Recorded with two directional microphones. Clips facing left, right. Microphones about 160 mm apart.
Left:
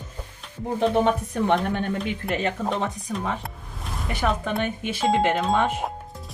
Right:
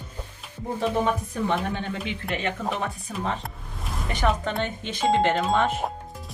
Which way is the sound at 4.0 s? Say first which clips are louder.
Even; 5° left (ahead or behind).